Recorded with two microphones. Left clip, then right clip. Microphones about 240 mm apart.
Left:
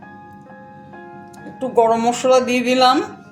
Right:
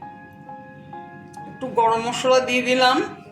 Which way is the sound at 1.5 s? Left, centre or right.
Left.